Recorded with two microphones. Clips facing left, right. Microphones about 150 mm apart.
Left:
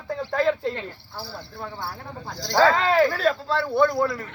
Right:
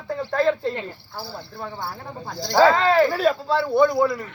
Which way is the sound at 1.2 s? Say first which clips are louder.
Right 2 dB; 15° right (ahead or behind).